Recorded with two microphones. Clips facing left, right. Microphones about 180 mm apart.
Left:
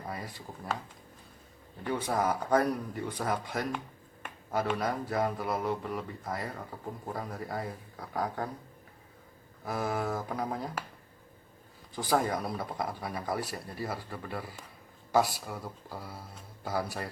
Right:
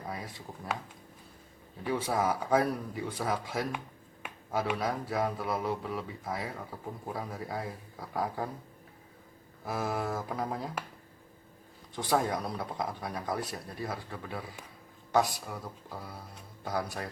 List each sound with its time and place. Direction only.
0.1 s speech: centre (ahead or behind)
1.8 s speech: centre (ahead or behind)
9.6 s speech: centre (ahead or behind)
11.9 s speech: centre (ahead or behind)